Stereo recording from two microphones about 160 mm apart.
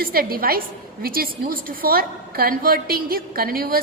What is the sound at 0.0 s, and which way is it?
A woman's voice, 70° right (ahead or behind).